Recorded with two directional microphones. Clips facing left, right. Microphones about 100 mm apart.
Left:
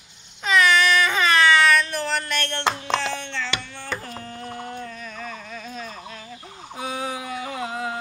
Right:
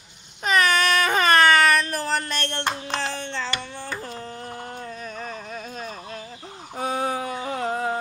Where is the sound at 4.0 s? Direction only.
30° right (ahead or behind).